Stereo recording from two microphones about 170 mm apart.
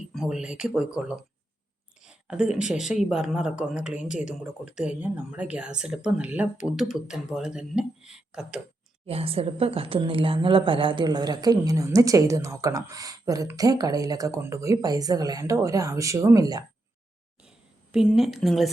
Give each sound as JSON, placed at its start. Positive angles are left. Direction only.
{"t": 0.1, "sound": "speech", "side_deg": 0}
{"t": 9.0, "sound": "a woman's voice", "side_deg": -35}
{"t": 17.9, "sound": "speech", "side_deg": 0}